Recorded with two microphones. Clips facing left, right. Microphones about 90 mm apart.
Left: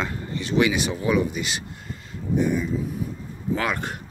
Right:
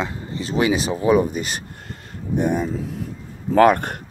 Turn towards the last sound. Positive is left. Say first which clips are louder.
# right 11 dB
turn(degrees=-50)  # may be behind; listen again after turning